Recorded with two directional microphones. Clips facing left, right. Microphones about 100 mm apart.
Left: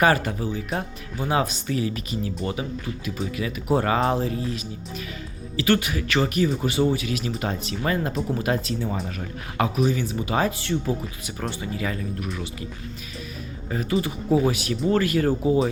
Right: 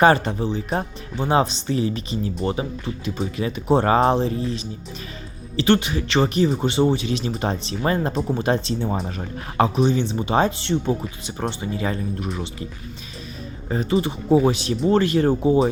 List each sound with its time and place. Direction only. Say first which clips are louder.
0.0 s speech: right 4 dB; 30° right (ahead or behind)
13.7 s speech: right 3 dB; 30° right (ahead or behind)